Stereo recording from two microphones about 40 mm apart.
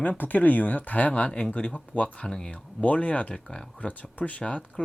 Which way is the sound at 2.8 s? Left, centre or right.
Left.